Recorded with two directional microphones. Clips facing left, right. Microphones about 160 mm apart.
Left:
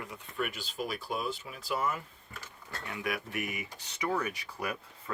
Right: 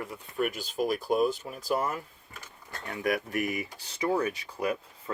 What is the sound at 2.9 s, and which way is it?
Speech, 40° right (ahead or behind).